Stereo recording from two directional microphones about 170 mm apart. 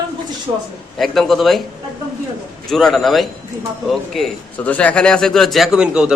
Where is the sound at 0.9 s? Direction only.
Centre (ahead or behind).